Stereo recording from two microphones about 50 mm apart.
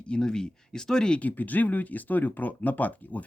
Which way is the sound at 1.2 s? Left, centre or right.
Left.